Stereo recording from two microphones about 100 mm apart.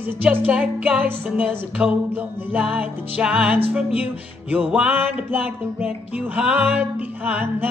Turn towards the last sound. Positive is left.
turn(degrees=-20)  # may be behind; listen again after turning